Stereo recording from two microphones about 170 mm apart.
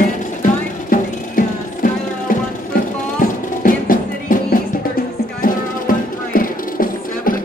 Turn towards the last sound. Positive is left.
turn(degrees=55)  # may be behind; listen again after turning